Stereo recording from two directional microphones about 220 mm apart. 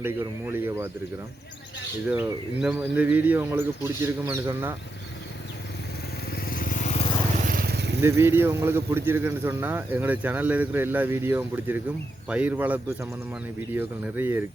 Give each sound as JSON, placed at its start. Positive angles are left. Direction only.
{"t": 0.0, "sound": "a man's voice", "side_deg": -10}
{"t": 2.0, "sound": "a man's voice", "side_deg": -5}
{"t": 6.3, "sound": "vehicle", "side_deg": 40}
{"t": 7.4, "sound": "vehicle", "side_deg": -40}
{"t": 8.0, "sound": "a man's voice", "side_deg": -10}